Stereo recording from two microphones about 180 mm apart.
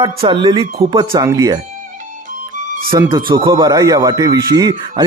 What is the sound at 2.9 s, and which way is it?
A man's voice, 25° right (ahead or behind).